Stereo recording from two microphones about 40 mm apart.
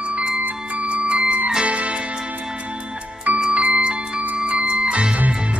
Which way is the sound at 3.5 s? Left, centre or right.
Right.